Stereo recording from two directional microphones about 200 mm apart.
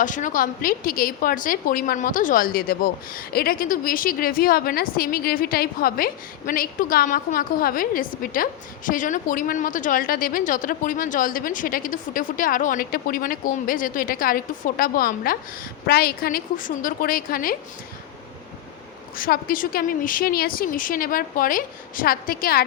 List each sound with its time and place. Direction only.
0.0 s a woman's voice: 40° left (ahead or behind)
19.1 s a woman's voice: 45° left (ahead or behind)